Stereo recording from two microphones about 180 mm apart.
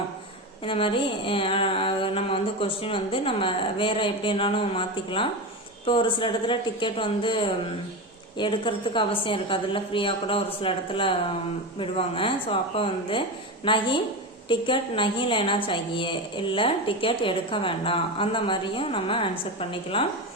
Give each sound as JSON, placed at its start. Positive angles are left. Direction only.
{"t": 0.6, "sound": "a woman's voice", "side_deg": 30}